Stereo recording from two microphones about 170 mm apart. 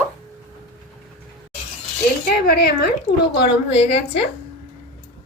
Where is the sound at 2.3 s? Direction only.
65° left (ahead or behind).